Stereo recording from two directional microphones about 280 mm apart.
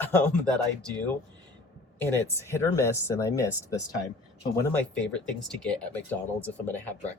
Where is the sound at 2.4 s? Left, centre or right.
Centre.